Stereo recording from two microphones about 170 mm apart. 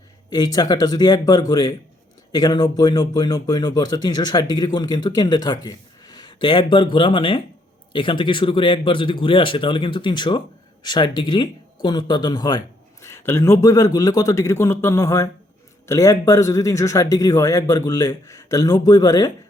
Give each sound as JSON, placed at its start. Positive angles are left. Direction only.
{"t": 0.3, "sound": "speech", "side_deg": 25}